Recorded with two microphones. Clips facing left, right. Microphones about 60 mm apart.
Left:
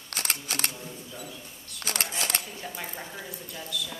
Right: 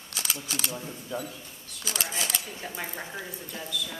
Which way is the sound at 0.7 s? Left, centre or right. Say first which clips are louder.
Right 6 dB; right.